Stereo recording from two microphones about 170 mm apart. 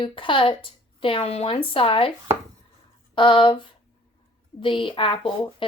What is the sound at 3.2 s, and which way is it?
A woman's voice, 30° left (ahead or behind).